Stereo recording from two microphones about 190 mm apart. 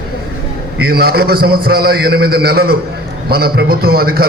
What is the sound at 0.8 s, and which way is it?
A man's voice, 55° right (ahead or behind).